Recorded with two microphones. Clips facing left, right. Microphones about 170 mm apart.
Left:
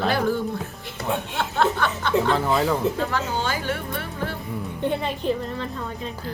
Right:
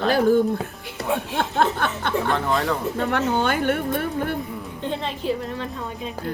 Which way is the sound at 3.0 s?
65° right (ahead or behind).